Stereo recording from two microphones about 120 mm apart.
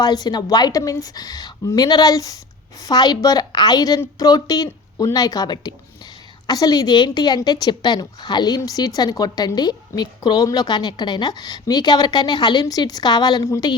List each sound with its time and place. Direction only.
0.0 s a woman's voice: 35° left (ahead or behind)